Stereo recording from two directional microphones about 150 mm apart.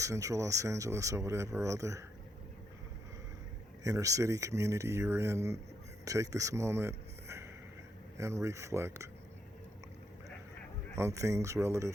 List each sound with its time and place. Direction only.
0.0 s speech: 20° right (ahead or behind)
3.8 s speech: 20° right (ahead or behind)
10.9 s speech: 20° right (ahead or behind)